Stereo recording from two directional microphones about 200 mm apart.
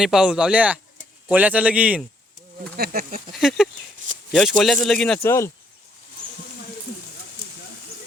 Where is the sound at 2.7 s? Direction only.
50° right (ahead or behind).